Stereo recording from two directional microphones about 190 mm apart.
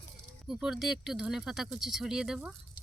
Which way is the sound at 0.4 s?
Centre (ahead or behind).